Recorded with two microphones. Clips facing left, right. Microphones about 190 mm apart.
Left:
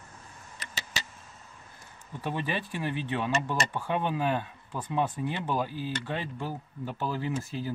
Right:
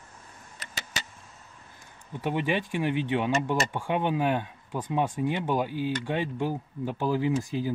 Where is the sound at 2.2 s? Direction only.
15° right (ahead or behind).